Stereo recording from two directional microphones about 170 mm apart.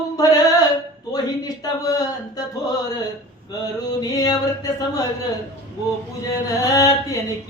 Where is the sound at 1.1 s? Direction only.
20° left (ahead or behind).